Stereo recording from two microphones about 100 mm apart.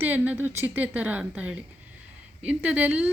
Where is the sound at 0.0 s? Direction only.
20° right (ahead or behind).